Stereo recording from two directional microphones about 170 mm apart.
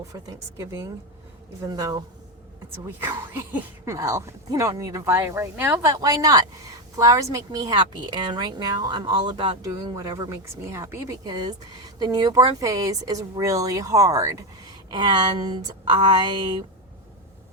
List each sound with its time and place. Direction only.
0.1 s a woman's voice: 20° right (ahead or behind)